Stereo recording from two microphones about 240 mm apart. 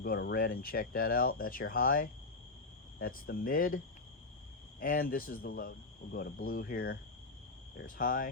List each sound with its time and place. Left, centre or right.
0.0 s speech: left
4.8 s speech: left